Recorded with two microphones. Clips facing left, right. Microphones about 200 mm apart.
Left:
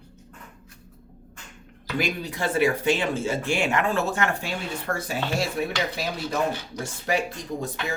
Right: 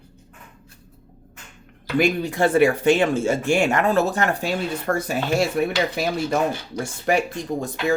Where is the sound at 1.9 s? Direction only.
50° right (ahead or behind).